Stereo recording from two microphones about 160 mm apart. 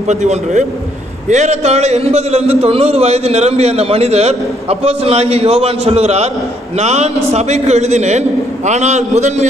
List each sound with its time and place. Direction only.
0.1 s a man's voice: 45° right (ahead or behind)